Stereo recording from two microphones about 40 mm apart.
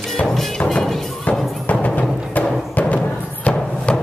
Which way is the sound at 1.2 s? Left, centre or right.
Left.